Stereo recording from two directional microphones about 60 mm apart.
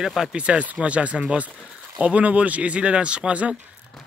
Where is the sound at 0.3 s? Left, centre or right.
Centre.